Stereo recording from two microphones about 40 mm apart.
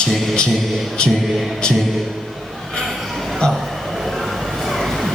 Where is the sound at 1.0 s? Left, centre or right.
Left.